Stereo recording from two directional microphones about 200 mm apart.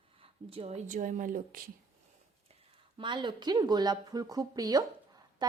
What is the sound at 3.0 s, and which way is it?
A woman's voice, 25° right (ahead or behind).